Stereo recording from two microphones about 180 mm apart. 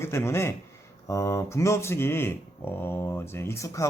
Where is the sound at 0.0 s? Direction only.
15° left (ahead or behind).